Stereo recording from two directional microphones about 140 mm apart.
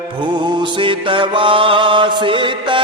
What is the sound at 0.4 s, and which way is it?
Mantra, 35° right (ahead or behind).